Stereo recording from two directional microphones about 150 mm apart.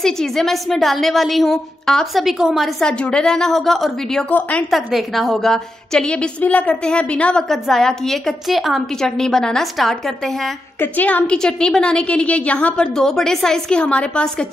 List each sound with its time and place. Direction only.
0.0 s a woman's voice: 5° left (ahead or behind)